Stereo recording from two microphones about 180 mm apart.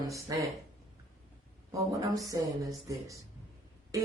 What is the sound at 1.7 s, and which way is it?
Speech, 20° right (ahead or behind).